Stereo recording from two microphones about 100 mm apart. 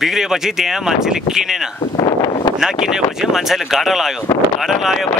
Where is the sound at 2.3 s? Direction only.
50° left (ahead or behind).